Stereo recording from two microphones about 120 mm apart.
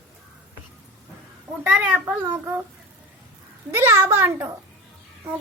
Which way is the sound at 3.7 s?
20° right (ahead or behind).